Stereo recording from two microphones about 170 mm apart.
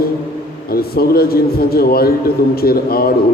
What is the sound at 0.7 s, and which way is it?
Speech, 60° left (ahead or behind).